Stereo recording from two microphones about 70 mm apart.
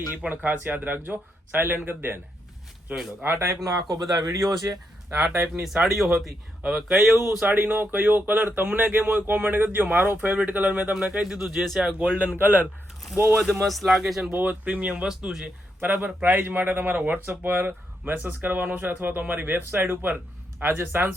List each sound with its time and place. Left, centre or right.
0.2 s a man's voice: right
2.9 s speech: centre
3.2 s a man's voice: right
3.6 s speech: right
3.8 s speech: right
5.6 s speech: centre
7.4 s a man's voice: right
11.1 s speech: centre
11.9 s speech: right
13.4 s speech: centre
14.3 s speech: right
15.0 s speech: centre
15.8 s a man's voice: right